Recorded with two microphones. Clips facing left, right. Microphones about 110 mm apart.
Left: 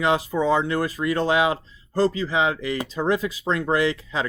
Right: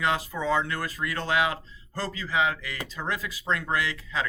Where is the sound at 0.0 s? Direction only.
20° left (ahead or behind).